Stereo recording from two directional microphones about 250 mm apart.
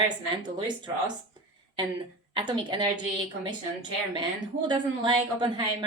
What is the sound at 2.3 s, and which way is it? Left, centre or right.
A woman's voice, centre.